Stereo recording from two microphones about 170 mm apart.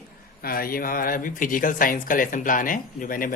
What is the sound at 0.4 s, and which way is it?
Speech, 60° left (ahead or behind).